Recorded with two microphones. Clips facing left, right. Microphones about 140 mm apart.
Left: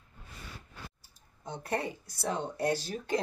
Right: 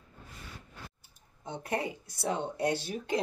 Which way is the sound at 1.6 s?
15° right (ahead or behind).